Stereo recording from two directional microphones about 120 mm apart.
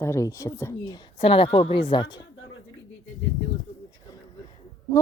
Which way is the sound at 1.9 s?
40° left (ahead or behind).